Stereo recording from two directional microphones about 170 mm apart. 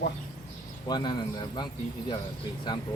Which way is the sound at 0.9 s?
25° left (ahead or behind).